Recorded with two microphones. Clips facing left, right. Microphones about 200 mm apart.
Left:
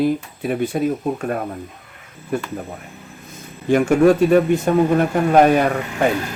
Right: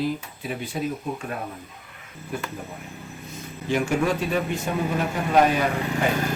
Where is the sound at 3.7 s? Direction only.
55° left (ahead or behind).